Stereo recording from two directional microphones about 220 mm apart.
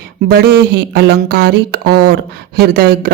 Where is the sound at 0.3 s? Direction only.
45° right (ahead or behind).